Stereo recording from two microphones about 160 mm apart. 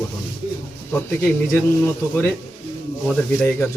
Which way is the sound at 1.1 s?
15° left (ahead or behind).